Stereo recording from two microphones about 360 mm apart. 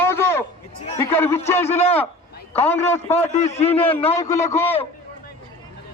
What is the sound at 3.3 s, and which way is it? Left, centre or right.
A man's voice, centre.